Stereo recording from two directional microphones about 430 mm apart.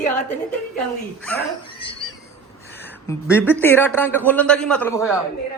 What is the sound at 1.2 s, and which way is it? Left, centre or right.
Speech, centre.